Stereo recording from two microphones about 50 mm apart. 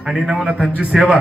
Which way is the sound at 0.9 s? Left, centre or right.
Centre.